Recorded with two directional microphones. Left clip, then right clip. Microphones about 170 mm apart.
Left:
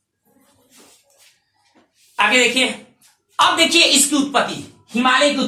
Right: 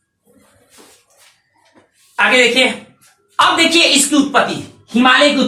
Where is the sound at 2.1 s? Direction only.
15° left (ahead or behind).